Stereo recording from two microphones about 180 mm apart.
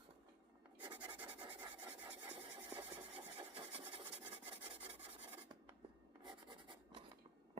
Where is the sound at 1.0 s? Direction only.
10° right (ahead or behind).